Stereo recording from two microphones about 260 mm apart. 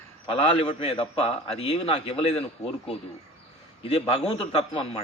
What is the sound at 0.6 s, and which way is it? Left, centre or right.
A man's voice, left.